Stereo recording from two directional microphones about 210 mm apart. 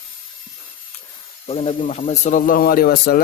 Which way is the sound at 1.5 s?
30° left (ahead or behind).